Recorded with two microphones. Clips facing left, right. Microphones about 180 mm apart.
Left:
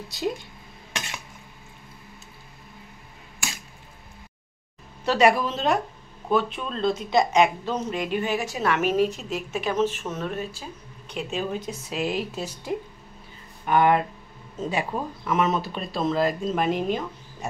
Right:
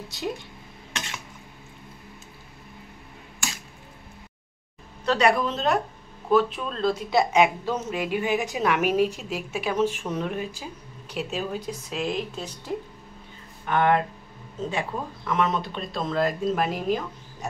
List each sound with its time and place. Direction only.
5.0 s a woman's voice: 5° left (ahead or behind)